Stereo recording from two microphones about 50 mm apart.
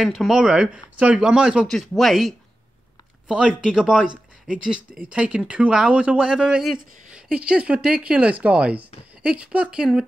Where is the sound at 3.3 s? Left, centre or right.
Centre.